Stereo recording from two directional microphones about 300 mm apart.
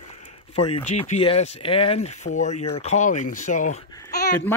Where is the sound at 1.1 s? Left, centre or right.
Left.